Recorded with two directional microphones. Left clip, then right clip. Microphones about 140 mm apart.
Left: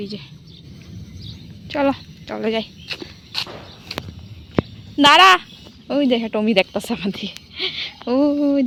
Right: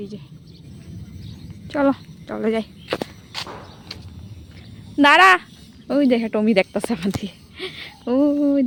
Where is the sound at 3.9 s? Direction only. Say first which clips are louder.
Left 8 dB; 10° left (ahead or behind).